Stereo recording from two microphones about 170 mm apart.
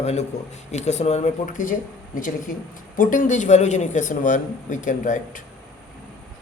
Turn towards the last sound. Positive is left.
turn(degrees=50)  # may be behind; listen again after turning